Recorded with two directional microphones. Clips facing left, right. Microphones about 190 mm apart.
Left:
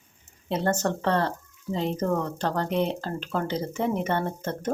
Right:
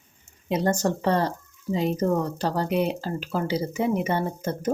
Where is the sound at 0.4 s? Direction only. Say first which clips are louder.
Right 2 dB; 15° right (ahead or behind).